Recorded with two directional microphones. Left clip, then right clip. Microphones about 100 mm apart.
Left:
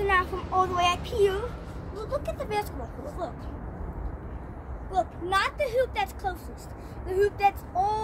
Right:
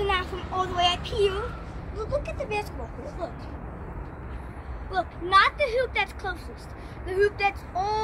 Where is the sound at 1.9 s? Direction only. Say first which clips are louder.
Right 2 dB; 45° left (ahead or behind).